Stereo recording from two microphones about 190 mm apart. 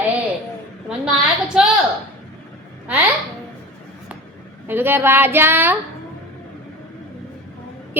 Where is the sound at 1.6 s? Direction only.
Centre (ahead or behind).